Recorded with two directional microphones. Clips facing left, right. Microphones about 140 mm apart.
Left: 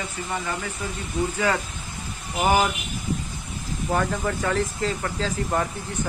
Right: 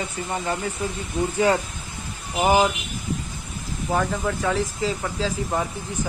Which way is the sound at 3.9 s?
Centre (ahead or behind).